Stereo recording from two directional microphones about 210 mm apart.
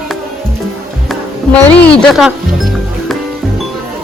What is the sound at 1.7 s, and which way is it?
Speech, 5° left (ahead or behind).